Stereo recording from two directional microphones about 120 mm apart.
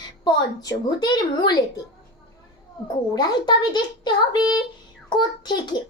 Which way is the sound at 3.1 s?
35° left (ahead or behind).